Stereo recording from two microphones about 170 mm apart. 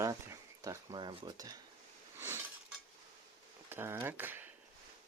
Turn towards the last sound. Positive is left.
turn(degrees=-10)  # may be behind; listen again after turning